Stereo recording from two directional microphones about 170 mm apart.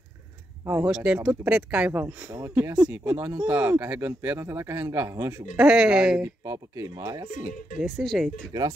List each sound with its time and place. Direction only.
0.7 s speech: 10° right (ahead or behind)
2.2 s speech: 20° right (ahead or behind)
2.5 s speech: 10° right (ahead or behind)
5.6 s speech: 5° right (ahead or behind)
6.2 s speech: 15° right (ahead or behind)
7.8 s speech: centre (ahead or behind)